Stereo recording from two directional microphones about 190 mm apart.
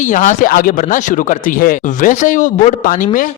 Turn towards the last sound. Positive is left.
turn(degrees=45)  # may be behind; listen again after turning